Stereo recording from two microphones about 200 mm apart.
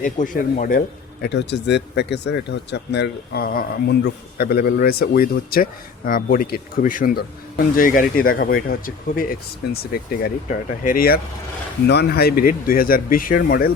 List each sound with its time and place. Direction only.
0.0 s speech: 40° left (ahead or behind)